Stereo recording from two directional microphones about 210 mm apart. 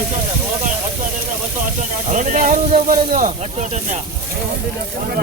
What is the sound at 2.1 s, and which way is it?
Speech, 35° right (ahead or behind).